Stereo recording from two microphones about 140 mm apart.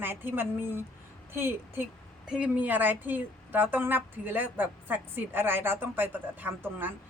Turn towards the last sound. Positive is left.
turn(degrees=-15)  # may be behind; listen again after turning